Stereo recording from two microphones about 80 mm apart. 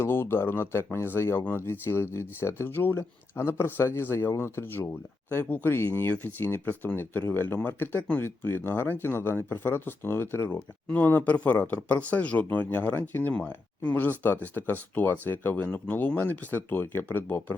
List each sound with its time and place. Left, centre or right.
0.0 s speech: left
10.9 s speech: left